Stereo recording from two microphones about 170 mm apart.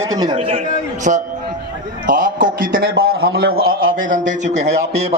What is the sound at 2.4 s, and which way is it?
A man's voice, 55° right (ahead or behind).